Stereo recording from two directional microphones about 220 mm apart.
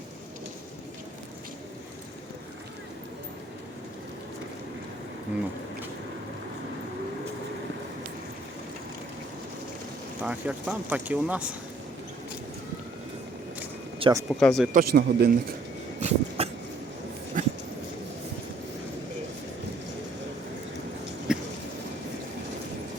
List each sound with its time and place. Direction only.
10.2 s speech: 5° right (ahead or behind)
14.0 s speech: 15° right (ahead or behind)
14.3 s speech: centre (ahead or behind)
14.7 s a man's voice: 45° right (ahead or behind)
16.0 s dog: 30° right (ahead or behind)
21.3 s a sound: 5° right (ahead or behind)